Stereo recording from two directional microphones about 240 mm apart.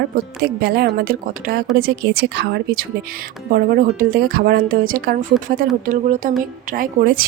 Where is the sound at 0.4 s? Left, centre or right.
Right.